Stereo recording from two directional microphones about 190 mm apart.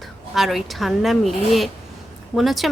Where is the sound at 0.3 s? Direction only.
Centre (ahead or behind).